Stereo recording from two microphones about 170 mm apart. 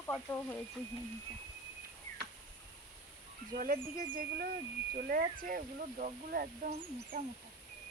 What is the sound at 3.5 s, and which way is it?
Speech, 55° right (ahead or behind).